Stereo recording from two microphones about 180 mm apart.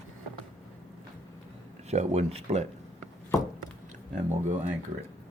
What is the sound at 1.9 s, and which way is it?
Speech, 35° right (ahead or behind).